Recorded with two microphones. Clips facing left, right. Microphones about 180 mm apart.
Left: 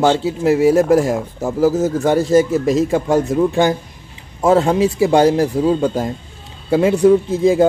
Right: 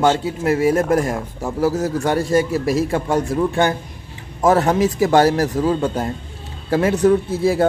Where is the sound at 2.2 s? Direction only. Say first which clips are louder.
Left 4 dB; 25° left (ahead or behind).